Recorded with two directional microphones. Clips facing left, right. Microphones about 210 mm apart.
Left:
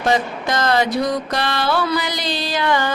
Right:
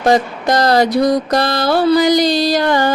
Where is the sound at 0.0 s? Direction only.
40° right (ahead or behind).